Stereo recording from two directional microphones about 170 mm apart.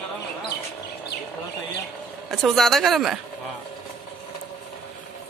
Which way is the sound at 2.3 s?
Centre (ahead or behind).